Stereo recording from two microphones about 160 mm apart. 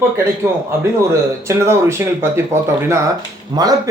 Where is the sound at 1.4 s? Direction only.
15° right (ahead or behind).